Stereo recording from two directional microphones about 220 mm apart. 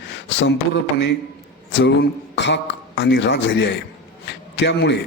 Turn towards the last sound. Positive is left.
turn(degrees=50)  # may be behind; listen again after turning